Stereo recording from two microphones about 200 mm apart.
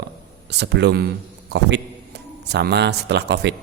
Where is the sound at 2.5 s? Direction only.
55° right (ahead or behind).